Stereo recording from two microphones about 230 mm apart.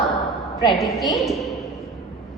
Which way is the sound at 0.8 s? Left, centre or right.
Centre.